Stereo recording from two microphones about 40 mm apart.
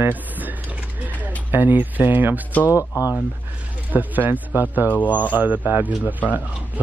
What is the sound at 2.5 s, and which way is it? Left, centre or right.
Speech, left.